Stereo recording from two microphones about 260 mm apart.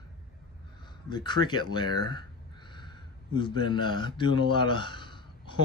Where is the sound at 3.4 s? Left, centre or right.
Centre.